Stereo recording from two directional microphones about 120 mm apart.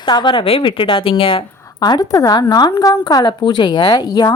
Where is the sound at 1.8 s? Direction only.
35° left (ahead or behind).